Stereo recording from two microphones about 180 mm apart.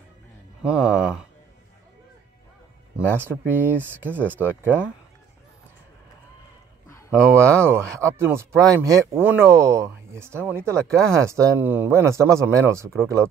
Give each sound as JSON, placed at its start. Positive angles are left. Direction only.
{"t": 0.6, "sound": "speech", "side_deg": -5}
{"t": 3.1, "sound": "speech", "side_deg": -10}
{"t": 7.1, "sound": "speech", "side_deg": -15}